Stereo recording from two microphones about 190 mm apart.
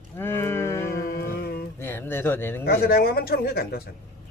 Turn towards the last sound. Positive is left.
turn(degrees=55)  # may be behind; listen again after turning